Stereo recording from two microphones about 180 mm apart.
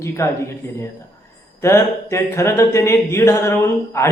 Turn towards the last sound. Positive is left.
turn(degrees=15)  # may be behind; listen again after turning